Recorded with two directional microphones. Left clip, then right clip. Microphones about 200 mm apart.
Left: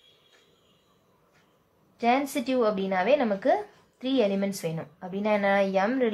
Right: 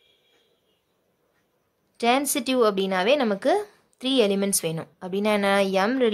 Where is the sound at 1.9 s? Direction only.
50° right (ahead or behind).